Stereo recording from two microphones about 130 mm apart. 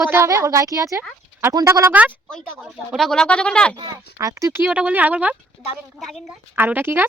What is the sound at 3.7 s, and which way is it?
Speech, 30° right (ahead or behind).